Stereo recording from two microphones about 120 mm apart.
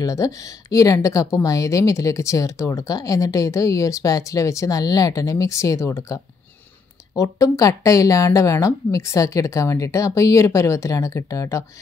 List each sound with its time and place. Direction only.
0.0 s speech: 25° left (ahead or behind)